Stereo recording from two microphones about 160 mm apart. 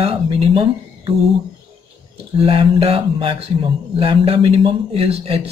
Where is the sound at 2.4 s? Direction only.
35° right (ahead or behind).